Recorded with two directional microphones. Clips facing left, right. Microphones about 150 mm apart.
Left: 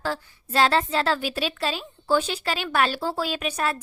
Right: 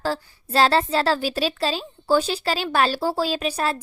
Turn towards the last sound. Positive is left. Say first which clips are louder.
# right 3 dB
turn(degrees=-30)  # may be behind; listen again after turning